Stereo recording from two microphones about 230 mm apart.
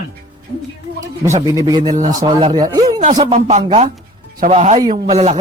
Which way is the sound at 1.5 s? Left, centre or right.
Centre.